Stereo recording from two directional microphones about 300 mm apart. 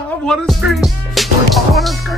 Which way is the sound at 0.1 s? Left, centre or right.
Centre.